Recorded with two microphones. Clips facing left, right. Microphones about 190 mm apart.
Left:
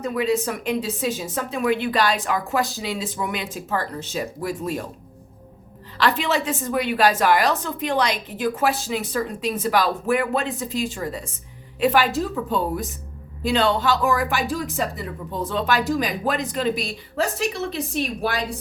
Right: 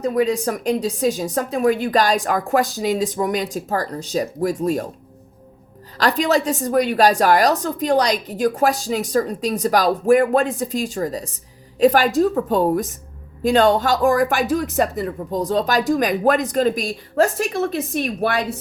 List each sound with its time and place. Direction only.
0.0 s a woman's voice: 40° right (ahead or behind)
6.0 s a woman's voice: 40° right (ahead or behind)
15.9 s speech: 50° right (ahead or behind)